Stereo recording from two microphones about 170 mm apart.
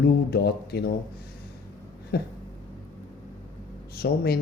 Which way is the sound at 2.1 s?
70° left (ahead or behind).